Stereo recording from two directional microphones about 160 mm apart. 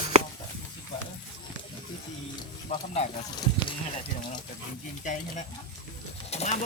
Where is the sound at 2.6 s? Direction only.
45° left (ahead or behind).